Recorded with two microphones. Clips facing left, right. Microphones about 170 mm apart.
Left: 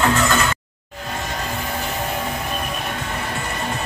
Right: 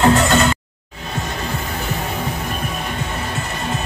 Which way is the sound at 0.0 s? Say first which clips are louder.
Right 4 dB; 35° right (ahead or behind).